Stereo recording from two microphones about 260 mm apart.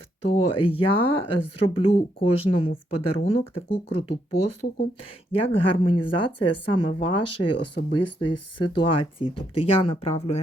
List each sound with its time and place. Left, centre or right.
0.3 s speech: left